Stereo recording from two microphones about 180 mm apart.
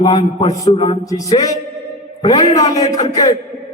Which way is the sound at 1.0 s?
20° left (ahead or behind).